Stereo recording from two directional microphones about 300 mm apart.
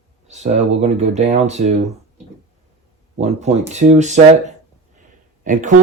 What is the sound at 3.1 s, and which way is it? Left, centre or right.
Speech, right.